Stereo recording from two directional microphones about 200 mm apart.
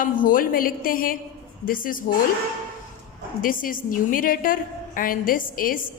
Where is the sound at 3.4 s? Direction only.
45° left (ahead or behind).